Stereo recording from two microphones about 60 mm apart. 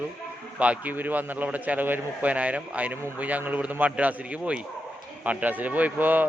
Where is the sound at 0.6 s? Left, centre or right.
Right.